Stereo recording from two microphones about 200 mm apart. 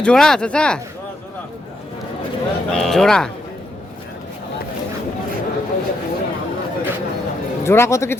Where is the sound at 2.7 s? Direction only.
Centre (ahead or behind).